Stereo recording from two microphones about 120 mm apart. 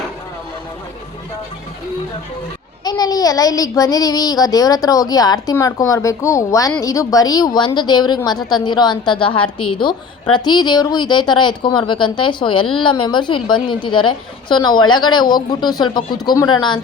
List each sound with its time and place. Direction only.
2.8 s child singing: 35° left (ahead or behind)